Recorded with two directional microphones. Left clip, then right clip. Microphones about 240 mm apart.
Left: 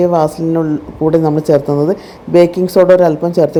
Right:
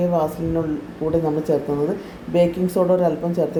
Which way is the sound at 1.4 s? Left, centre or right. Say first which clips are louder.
Left 9 dB; left.